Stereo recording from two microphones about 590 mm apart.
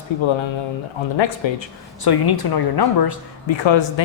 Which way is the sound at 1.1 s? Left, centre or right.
Left.